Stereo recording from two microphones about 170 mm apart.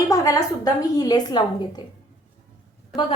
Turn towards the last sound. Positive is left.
turn(degrees=0)  # may be behind; listen again after turning